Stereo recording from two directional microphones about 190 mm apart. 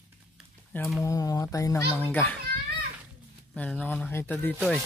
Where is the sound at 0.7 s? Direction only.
Centre (ahead or behind).